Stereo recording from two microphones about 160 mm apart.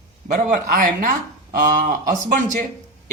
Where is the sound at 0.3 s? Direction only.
55° right (ahead or behind).